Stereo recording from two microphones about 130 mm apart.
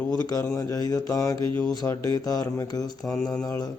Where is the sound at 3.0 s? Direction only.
5° left (ahead or behind).